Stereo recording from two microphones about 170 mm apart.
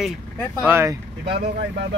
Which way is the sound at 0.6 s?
15° right (ahead or behind).